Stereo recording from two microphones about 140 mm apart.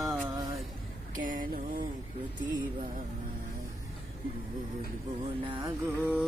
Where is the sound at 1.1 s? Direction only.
70° right (ahead or behind).